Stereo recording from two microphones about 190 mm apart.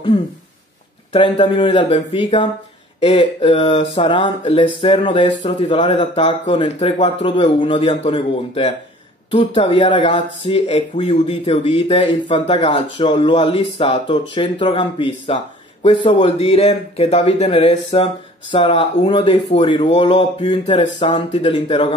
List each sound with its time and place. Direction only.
1.1 s speech: 30° left (ahead or behind)